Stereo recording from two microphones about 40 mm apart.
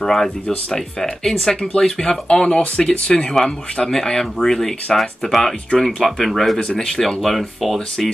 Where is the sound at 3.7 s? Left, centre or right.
Centre.